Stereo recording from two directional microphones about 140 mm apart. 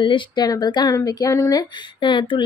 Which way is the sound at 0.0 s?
35° left (ahead or behind).